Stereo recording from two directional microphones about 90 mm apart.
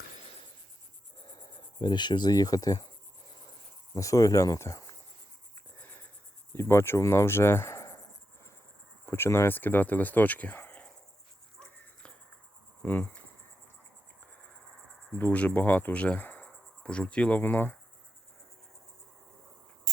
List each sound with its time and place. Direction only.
1.8 s speech: 55° left (ahead or behind)
3.9 s speech: 35° left (ahead or behind)
6.5 s speech: 30° left (ahead or behind)
9.0 s speech: 25° left (ahead or behind)
12.8 s speech: 20° left (ahead or behind)
15.1 s speech: 15° left (ahead or behind)